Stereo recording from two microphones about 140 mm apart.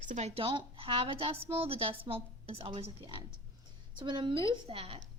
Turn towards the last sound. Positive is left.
turn(degrees=-45)  # may be behind; listen again after turning